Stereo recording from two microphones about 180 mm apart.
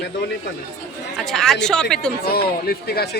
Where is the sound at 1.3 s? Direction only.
Centre (ahead or behind).